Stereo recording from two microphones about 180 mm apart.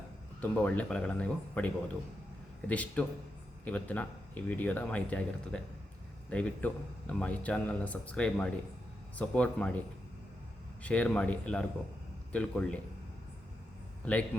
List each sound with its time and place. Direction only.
0.6 s a man's voice: 5° left (ahead or behind)
10.8 s a man's voice: 5° left (ahead or behind)
14.0 s a man's voice: 5° left (ahead or behind)